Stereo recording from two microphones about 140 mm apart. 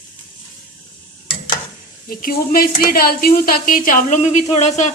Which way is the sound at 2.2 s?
90° left.